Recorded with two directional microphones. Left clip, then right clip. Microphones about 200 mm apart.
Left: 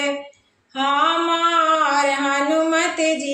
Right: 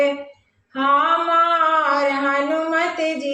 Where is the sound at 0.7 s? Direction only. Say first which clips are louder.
Right 2 dB; 40° left (ahead or behind).